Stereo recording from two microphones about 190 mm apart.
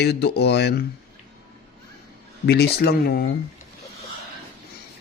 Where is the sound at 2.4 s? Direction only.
60° left (ahead or behind).